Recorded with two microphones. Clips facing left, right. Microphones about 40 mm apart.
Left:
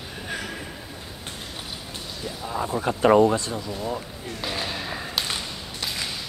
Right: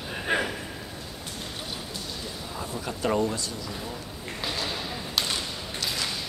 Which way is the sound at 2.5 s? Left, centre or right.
Left.